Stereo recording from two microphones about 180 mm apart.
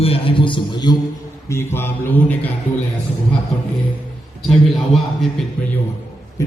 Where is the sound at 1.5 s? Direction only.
15° left (ahead or behind).